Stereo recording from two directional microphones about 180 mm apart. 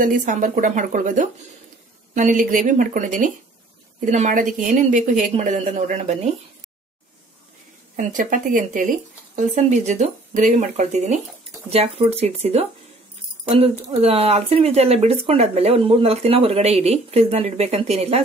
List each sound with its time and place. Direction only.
0.0 s a woman's voice: 45° right (ahead or behind)
7.9 s a woman's voice: 45° right (ahead or behind)